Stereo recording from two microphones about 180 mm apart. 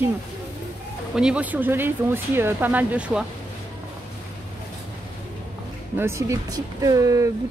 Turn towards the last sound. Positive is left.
turn(degrees=-20)  # may be behind; listen again after turning